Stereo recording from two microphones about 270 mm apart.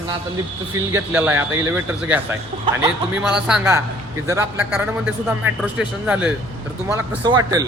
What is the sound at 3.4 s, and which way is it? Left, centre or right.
A man's voice, centre.